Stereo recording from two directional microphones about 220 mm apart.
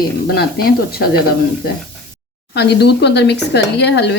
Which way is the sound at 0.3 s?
45° left (ahead or behind).